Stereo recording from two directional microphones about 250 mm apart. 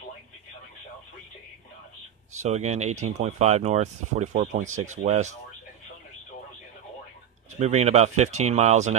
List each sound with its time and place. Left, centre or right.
2.4 s speech: right
7.5 s speech: right